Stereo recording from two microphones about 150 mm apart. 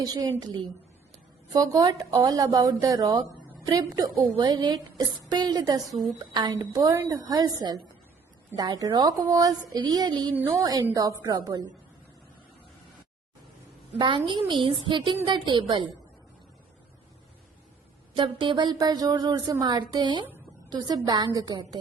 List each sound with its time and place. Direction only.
0.0 s speech: 25° right (ahead or behind)
1.5 s speech: 25° right (ahead or behind)
10.3 s a woman's voice: 15° right (ahead or behind)
10.6 s speech: 25° right (ahead or behind)
14.0 s a woman's voice: 35° right (ahead or behind)
18.1 s speech: 35° right (ahead or behind)